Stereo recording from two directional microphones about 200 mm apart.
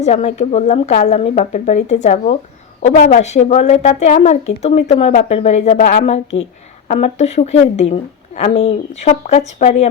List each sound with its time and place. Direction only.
0.0 s a woman's voice: 35° left (ahead or behind)